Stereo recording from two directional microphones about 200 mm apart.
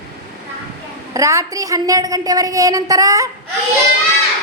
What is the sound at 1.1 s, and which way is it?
Speech, 15° right (ahead or behind).